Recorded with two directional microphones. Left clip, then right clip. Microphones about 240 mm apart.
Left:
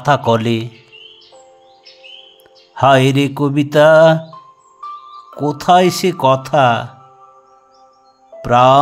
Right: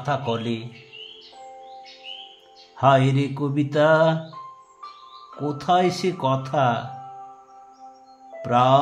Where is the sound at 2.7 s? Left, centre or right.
Left.